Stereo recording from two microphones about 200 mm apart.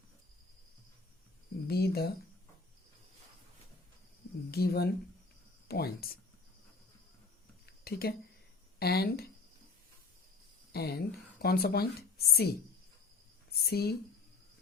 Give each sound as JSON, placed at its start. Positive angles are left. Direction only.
{"t": 1.6, "sound": "speech", "side_deg": 50}
{"t": 4.5, "sound": "speech", "side_deg": 50}
{"t": 7.9, "sound": "speech", "side_deg": 50}
{"t": 10.7, "sound": "a woman's voice", "side_deg": 50}